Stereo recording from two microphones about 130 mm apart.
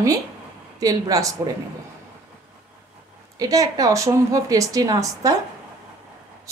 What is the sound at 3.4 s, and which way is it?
A woman's voice, 25° right (ahead or behind).